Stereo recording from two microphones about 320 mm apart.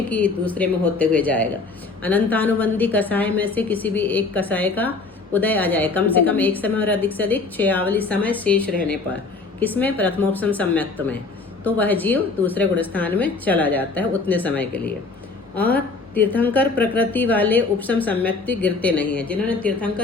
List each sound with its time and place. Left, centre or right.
0.1 s a woman's voice: centre